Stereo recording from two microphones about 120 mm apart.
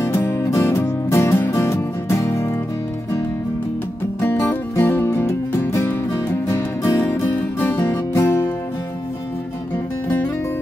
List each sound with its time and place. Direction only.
0.0 s music: 20° left (ahead or behind)
4.2 s music: 20° left (ahead or behind)